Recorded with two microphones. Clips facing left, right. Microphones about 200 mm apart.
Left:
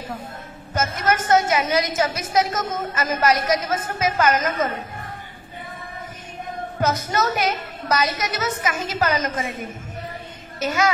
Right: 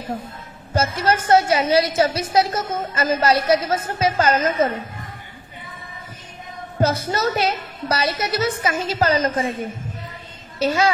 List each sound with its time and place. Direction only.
0.7 s a woman's voice: 30° right (ahead or behind)
6.8 s a woman's voice: 30° right (ahead or behind)